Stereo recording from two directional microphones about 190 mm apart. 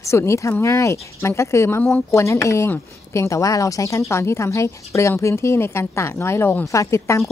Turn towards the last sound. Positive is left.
turn(degrees=15)  # may be behind; listen again after turning